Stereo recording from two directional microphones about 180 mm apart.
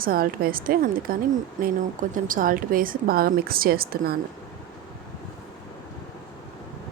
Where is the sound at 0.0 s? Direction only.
55° right (ahead or behind).